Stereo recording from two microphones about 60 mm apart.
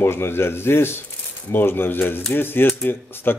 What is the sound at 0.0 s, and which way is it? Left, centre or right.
Speech, left.